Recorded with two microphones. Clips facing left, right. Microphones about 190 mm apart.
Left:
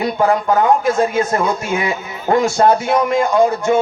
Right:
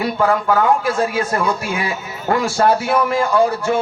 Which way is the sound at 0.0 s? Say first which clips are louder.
Left 2 dB; 25° left (ahead or behind).